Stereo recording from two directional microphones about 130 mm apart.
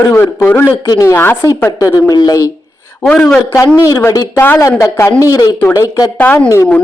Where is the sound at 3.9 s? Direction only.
30° left (ahead or behind).